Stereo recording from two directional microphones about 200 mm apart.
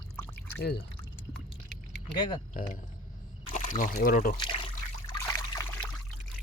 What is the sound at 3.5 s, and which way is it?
Speech, 40° left (ahead or behind).